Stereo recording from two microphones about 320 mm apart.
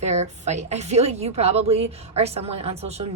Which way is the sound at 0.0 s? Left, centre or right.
Right.